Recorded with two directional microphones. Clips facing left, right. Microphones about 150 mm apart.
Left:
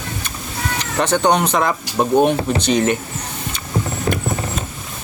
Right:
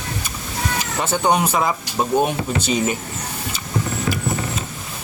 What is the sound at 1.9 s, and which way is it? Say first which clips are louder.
Speech: left 5 dB; 5° left (ahead or behind).